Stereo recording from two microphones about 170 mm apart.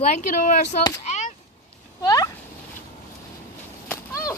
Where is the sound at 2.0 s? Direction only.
20° left (ahead or behind).